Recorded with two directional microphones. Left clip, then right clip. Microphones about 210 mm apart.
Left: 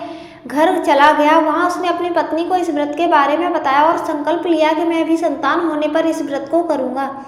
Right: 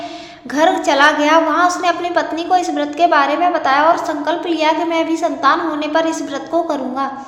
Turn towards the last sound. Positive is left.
turn(degrees=-10)  # may be behind; listen again after turning